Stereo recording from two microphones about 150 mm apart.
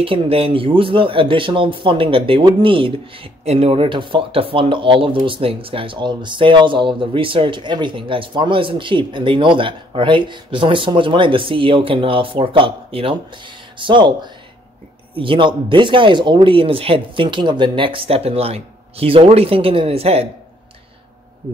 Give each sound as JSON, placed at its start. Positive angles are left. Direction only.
{"t": 0.0, "sound": "speech", "side_deg": -40}